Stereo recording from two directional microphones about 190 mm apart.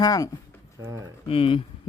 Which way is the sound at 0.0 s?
20° left (ahead or behind).